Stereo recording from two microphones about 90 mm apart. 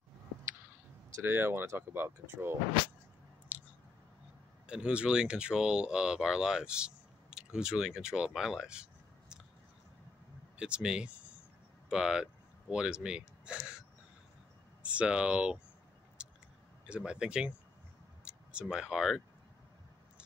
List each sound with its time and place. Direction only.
1.1 s speech: 25° right (ahead or behind)
3.5 s a sound: 15° right (ahead or behind)
4.6 s speech: 10° right (ahead or behind)
10.6 s speech: 10° right (ahead or behind)
16.2 s a sound: 10° right (ahead or behind)
16.8 s speech: 10° right (ahead or behind)